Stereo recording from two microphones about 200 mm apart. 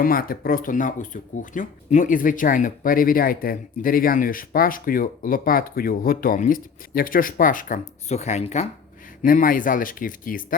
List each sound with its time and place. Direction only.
0.0 s speech: 45° left (ahead or behind)
9.2 s speech: 45° left (ahead or behind)